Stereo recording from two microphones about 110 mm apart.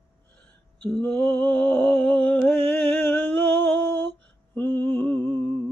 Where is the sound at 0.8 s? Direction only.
10° left (ahead or behind).